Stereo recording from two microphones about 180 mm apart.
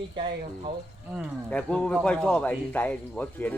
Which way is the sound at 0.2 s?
30° right (ahead or behind).